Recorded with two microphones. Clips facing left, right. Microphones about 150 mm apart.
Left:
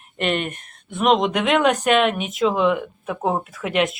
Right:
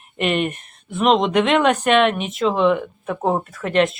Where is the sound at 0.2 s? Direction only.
Centre (ahead or behind).